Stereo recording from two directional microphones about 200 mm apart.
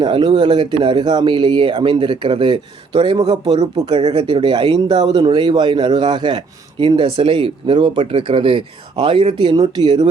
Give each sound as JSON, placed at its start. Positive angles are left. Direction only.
{"t": 0.0, "sound": "speech", "side_deg": -25}